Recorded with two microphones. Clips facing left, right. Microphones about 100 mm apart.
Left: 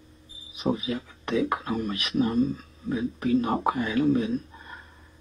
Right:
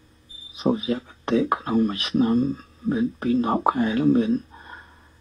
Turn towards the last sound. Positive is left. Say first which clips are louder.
# right 5 dB
turn(degrees=-35)  # may be behind; listen again after turning